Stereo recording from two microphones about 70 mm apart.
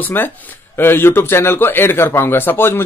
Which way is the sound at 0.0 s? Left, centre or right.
Left.